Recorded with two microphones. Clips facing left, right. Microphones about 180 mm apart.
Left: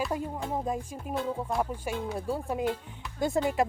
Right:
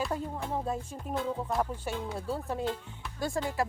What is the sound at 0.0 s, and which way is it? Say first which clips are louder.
Speech: left 2 dB; 10° left (ahead or behind).